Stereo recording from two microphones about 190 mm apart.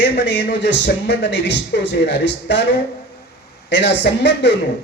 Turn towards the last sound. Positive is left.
turn(degrees=65)  # may be behind; listen again after turning